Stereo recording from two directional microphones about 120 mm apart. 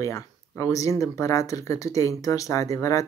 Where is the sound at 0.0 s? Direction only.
25° left (ahead or behind).